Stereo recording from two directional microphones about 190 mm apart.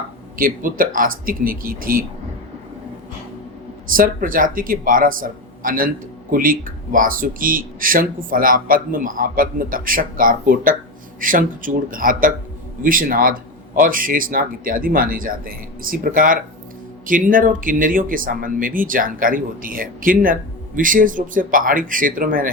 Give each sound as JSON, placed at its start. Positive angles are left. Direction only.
{"t": 0.3, "sound": "speech", "side_deg": -45}
{"t": 3.8, "sound": "speech", "side_deg": -45}